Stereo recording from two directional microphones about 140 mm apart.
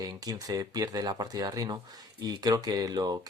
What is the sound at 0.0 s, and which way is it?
Speech, 25° right (ahead or behind).